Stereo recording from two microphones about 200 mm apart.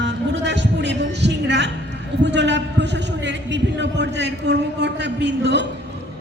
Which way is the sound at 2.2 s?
60° right (ahead or behind).